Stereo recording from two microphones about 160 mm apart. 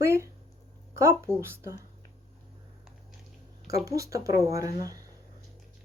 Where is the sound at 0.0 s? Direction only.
15° right (ahead or behind).